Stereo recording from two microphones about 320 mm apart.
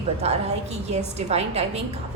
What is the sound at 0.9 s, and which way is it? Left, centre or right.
Speech, centre.